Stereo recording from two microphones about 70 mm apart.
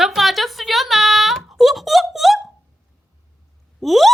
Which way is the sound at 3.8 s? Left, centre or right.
Centre.